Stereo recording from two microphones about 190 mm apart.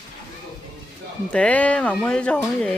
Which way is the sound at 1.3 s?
5° left (ahead or behind).